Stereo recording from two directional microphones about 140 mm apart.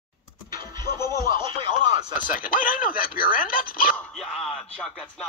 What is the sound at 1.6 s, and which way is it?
Radio, 30° right (ahead or behind).